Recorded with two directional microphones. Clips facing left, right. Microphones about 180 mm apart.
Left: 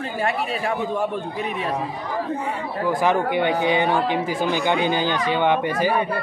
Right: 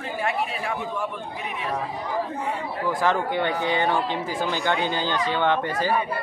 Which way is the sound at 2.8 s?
15° left (ahead or behind).